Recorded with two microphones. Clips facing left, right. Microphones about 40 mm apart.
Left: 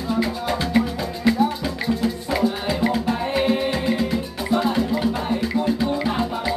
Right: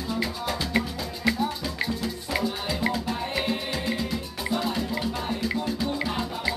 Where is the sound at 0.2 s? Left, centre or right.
Centre.